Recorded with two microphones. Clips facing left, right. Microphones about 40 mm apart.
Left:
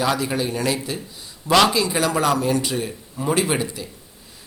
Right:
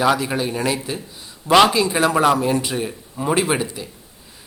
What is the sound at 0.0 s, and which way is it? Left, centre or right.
Speech, centre.